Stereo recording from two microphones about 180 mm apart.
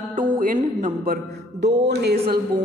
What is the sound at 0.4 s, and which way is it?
Speech, 45° right (ahead or behind).